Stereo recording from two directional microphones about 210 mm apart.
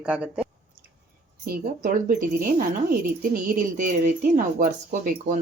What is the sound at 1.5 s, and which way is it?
Speech, 45° right (ahead or behind).